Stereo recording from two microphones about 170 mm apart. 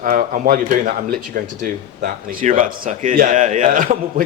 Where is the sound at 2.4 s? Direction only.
50° right (ahead or behind).